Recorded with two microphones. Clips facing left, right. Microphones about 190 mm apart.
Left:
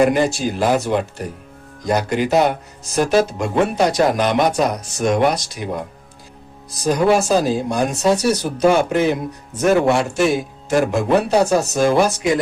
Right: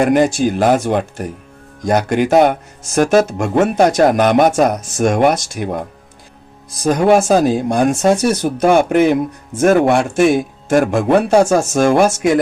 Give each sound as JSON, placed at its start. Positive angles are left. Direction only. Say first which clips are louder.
{"t": 0.0, "sound": "speech", "louder": "right 3 dB", "side_deg": -55}